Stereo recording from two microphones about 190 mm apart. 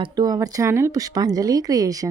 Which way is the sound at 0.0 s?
20° right (ahead or behind).